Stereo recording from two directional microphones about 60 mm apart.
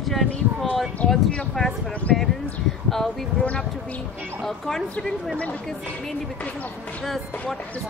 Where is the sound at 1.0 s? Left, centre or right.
Left.